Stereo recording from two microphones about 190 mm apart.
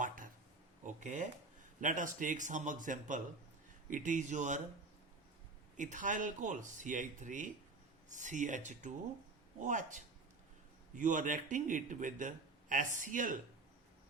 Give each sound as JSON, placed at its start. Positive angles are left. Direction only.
{"t": 0.9, "sound": "a sound", "side_deg": -40}
{"t": 1.8, "sound": "a man's voice", "side_deg": -45}
{"t": 5.7, "sound": "a man's voice", "side_deg": -40}